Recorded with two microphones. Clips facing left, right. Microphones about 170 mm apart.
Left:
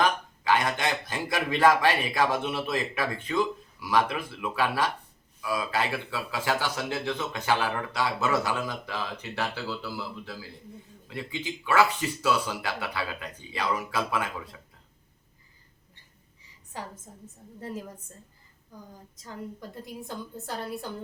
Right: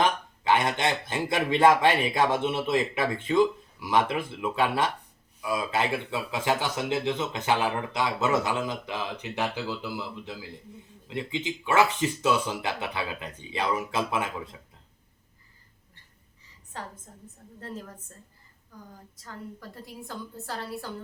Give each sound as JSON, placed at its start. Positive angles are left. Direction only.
{"t": 0.0, "sound": "speech", "side_deg": -25}
{"t": 17.1, "sound": "a woman's voice", "side_deg": 5}
{"t": 19.1, "sound": "a woman's voice", "side_deg": 20}